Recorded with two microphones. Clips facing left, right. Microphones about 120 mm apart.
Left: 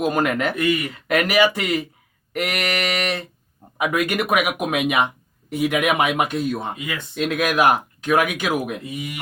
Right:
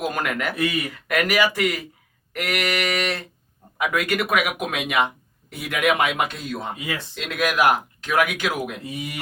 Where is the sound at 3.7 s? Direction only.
15° left (ahead or behind).